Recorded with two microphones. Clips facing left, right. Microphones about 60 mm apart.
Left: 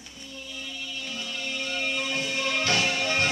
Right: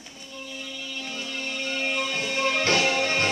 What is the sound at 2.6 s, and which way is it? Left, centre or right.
Music, right.